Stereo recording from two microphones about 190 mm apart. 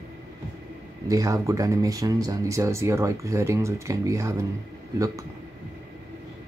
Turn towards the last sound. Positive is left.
turn(degrees=-15)  # may be behind; listen again after turning